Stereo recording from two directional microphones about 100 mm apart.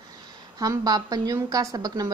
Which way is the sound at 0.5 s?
40° right (ahead or behind).